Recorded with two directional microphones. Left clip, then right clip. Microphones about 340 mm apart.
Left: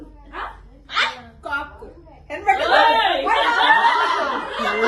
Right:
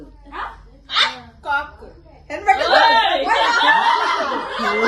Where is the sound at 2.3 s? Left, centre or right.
Right.